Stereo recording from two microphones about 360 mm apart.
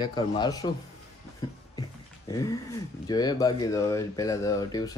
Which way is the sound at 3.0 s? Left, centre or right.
Centre.